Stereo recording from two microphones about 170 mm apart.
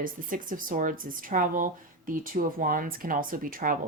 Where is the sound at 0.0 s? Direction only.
55° right (ahead or behind).